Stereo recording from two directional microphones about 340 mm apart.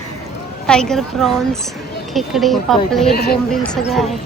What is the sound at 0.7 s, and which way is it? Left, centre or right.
Speech, centre.